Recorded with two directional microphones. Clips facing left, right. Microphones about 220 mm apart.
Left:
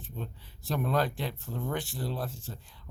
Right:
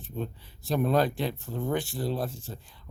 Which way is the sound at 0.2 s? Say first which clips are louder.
Right 7 dB; 15° right (ahead or behind).